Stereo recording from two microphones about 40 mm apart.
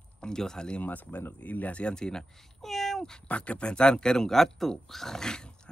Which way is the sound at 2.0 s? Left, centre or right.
Centre.